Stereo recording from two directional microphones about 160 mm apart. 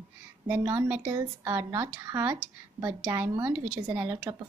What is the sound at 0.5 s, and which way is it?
Speech, 10° right (ahead or behind).